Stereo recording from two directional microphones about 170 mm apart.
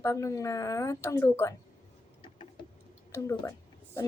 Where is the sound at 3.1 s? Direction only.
15° left (ahead or behind).